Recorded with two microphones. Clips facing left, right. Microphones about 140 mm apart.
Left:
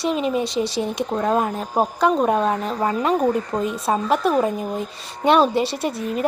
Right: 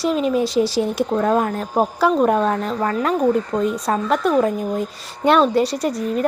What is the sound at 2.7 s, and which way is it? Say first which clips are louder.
A woman's voice: even; 15° left (ahead or behind).